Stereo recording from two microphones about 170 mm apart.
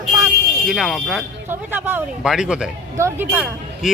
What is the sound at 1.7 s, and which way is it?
Speech, 10° right (ahead or behind).